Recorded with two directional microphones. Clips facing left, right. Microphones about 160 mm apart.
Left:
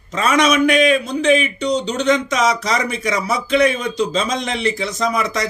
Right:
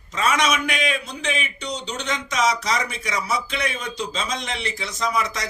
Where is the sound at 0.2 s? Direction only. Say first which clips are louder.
Left 7 dB; 50° left (ahead or behind).